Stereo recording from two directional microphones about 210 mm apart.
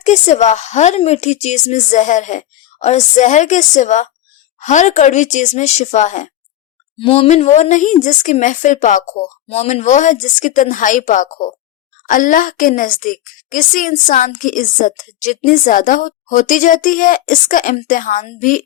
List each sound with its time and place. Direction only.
0.0 s a woman's voice: 35° left (ahead or behind)